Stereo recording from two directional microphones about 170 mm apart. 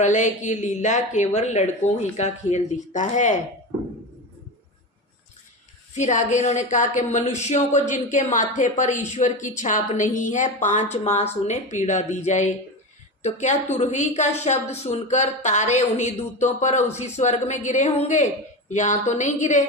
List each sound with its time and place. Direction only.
0.0 s speech: 45° left (ahead or behind)
6.0 s speech: 45° left (ahead or behind)